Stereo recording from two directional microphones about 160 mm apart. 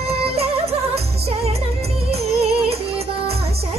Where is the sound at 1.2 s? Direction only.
40° right (ahead or behind).